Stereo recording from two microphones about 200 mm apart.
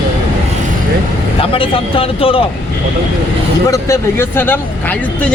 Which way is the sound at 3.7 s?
15° left (ahead or behind).